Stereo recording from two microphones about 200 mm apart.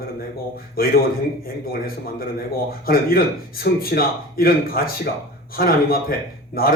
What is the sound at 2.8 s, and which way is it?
A man's voice, 50° left (ahead or behind).